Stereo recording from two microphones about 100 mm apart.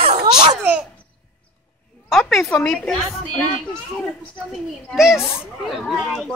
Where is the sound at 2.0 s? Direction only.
Centre (ahead or behind).